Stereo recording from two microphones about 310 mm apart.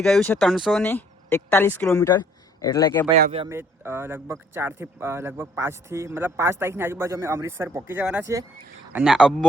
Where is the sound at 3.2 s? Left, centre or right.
Right.